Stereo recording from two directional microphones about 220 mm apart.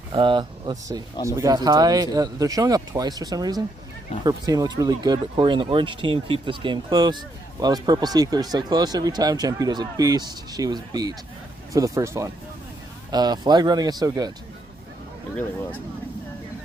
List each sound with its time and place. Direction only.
0.1 s speech: 20° right (ahead or behind)